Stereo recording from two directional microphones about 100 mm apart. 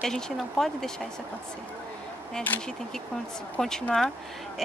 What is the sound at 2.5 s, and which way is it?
Speech, 15° left (ahead or behind).